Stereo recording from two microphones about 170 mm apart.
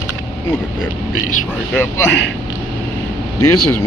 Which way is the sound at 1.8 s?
15° left (ahead or behind).